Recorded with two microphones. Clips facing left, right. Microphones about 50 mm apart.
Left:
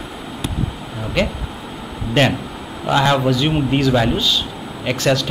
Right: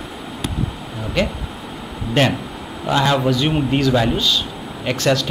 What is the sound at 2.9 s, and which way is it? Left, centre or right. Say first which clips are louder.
Speech: left 1 dB; centre.